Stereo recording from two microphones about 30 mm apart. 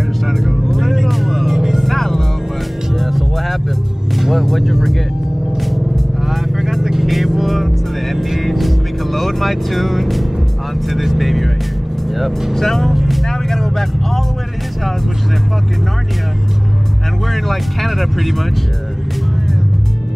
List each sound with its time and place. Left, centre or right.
0.7 s music: centre
1.6 s music: centre
1.9 s music: centre
3.0 s music: centre
6.3 s vehicle: centre
8.4 s music: centre
10.9 s vehicle: centre
12.2 s speech: centre
12.5 s speech: centre
12.9 s music: centre
13.3 s vehicle: centre
17.3 s speech: centre